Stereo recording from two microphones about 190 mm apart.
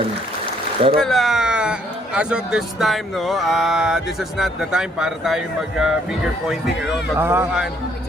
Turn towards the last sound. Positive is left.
turn(degrees=-10)  # may be behind; listen again after turning